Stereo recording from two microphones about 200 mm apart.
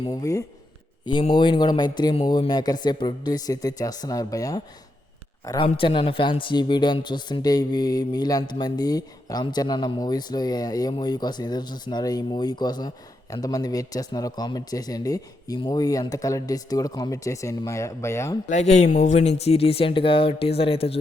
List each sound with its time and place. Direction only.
0.0 s a man's voice: 15° left (ahead or behind)
18.4 s speech: 35° left (ahead or behind)